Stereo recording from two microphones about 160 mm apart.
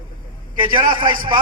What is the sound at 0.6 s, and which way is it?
Speech, 30° right (ahead or behind).